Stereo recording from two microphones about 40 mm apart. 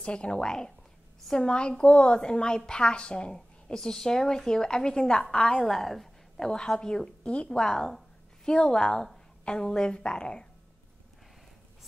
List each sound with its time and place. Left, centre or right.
0.0 s a woman's voice: left
5.6 s a woman's voice: centre
6.3 s a woman's voice: centre
7.2 s a woman's voice: left
7.5 s a woman's voice: centre
8.5 s a woman's voice: left